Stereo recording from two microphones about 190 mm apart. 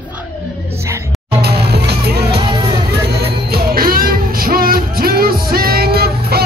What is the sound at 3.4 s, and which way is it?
Music, 55° right (ahead or behind).